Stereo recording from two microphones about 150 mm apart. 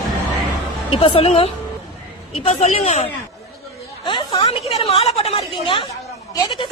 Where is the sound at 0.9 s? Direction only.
40° left (ahead or behind).